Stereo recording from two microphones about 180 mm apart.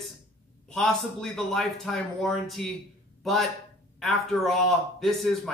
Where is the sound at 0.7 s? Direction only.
Centre (ahead or behind).